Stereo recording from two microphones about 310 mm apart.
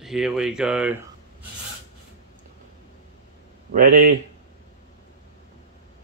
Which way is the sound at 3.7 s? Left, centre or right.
Right.